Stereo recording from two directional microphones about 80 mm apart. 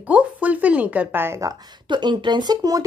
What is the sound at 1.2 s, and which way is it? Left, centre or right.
Speech, right.